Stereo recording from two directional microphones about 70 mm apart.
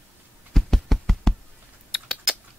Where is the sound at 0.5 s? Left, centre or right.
Centre.